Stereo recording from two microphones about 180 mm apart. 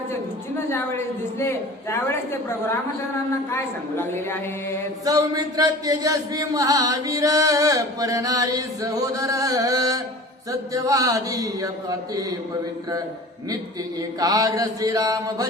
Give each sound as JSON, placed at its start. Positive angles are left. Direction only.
{"t": 0.7, "sound": "a man's voice", "side_deg": 15}
{"t": 3.5, "sound": "a man's voice", "side_deg": 15}
{"t": 5.0, "sound": "chant", "side_deg": -20}
{"t": 14.2, "sound": "chant", "side_deg": -20}